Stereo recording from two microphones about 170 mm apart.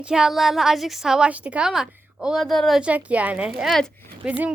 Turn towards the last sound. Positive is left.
turn(degrees=-5)  # may be behind; listen again after turning